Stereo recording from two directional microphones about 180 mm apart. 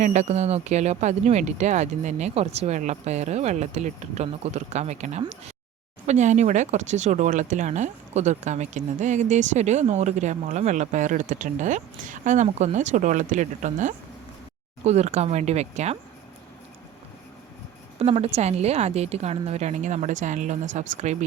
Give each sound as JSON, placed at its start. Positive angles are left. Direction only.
{"t": 0.0, "sound": "speech", "side_deg": -40}
{"t": 18.0, "sound": "speech", "side_deg": -35}